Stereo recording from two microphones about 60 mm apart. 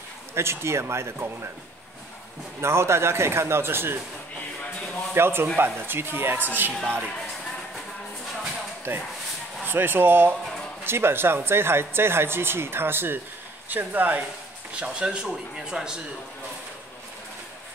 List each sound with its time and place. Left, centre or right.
0.3 s a man's voice: right
2.6 s a man's voice: right
5.1 s a man's voice: right
8.9 s speech: right
14.8 s speech: centre